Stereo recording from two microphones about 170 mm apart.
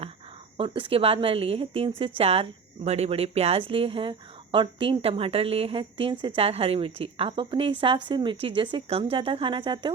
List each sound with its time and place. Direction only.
0.5 s a woman's voice: 30° right (ahead or behind)